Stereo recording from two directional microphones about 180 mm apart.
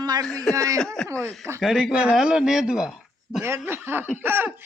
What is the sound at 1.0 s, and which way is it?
A man's voice, 5° left (ahead or behind).